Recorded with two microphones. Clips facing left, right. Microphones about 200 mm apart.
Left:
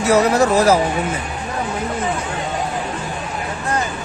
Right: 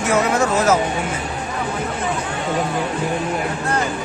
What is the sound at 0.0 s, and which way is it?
Speech, 40° left (ahead or behind).